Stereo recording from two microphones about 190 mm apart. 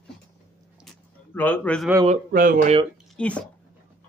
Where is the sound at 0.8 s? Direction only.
10° left (ahead or behind).